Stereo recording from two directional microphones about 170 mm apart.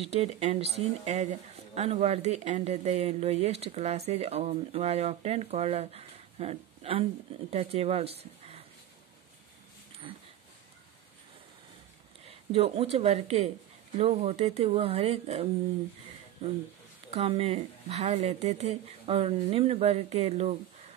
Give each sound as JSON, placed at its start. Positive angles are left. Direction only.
{"t": 0.0, "sound": "speech", "side_deg": -40}
{"t": 10.1, "sound": "a sound", "side_deg": -30}
{"t": 12.3, "sound": "speech", "side_deg": -35}
{"t": 17.1, "sound": "speech", "side_deg": -35}